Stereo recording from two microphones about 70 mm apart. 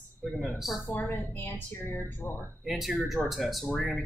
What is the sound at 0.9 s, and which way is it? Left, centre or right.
Speech, left.